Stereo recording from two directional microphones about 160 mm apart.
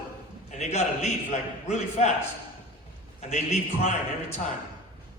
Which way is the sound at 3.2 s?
45° left (ahead or behind).